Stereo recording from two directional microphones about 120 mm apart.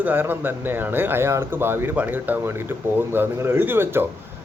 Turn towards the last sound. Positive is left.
turn(degrees=-20)  # may be behind; listen again after turning